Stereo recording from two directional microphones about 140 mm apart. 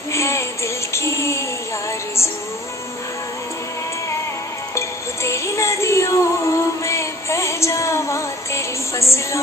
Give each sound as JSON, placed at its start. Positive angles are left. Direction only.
{"t": 0.1, "sound": "music", "side_deg": 20}
{"t": 4.7, "sound": "music", "side_deg": 20}